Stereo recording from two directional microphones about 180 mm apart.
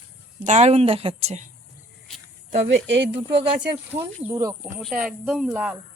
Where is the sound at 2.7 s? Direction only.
85° right.